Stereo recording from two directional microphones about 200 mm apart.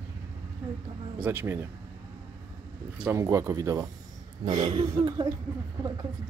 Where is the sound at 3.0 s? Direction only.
15° right (ahead or behind).